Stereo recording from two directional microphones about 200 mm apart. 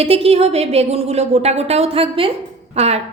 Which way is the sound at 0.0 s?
30° right (ahead or behind).